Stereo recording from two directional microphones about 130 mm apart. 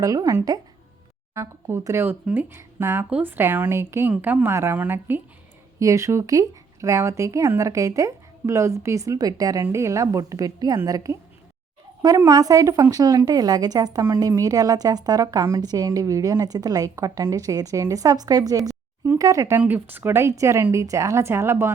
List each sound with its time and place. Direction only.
0.0 s a woman's voice: 25° right (ahead or behind)